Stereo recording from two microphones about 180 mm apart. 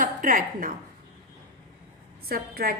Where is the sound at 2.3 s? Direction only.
55° right (ahead or behind).